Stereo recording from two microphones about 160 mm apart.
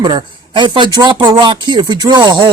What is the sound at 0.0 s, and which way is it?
Speech, 30° right (ahead or behind).